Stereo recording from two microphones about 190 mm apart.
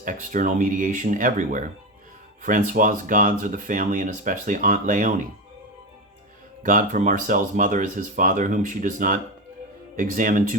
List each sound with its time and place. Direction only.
0.0 s speech: 45° right (ahead or behind)
6.6 s speech: 45° right (ahead or behind)